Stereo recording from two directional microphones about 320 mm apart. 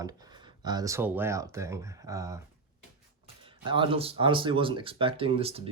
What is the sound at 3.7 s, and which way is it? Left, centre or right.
Speech, centre.